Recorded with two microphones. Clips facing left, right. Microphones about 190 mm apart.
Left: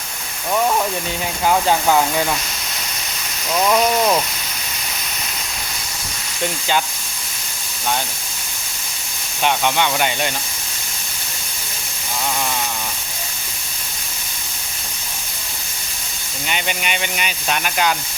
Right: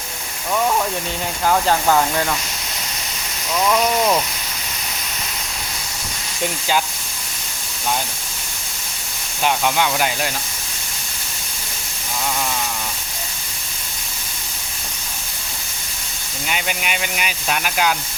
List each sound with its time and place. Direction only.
1.5 s speech: 5° left (ahead or behind)
3.7 s speech: 5° left (ahead or behind)
9.4 s speech: 5° right (ahead or behind)
16.5 s speech: 5° right (ahead or behind)